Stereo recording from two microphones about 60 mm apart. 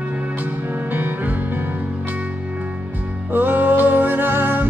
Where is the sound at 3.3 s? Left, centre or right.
Right.